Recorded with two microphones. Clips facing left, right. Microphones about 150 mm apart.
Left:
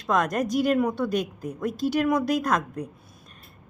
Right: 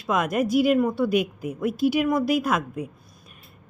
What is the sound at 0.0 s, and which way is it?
A woman's voice, 5° right (ahead or behind).